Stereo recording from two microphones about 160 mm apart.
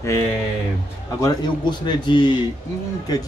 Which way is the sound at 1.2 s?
25° left (ahead or behind).